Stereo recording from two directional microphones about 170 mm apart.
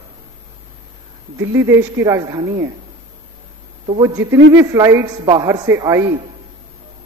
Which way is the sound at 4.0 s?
20° right (ahead or behind).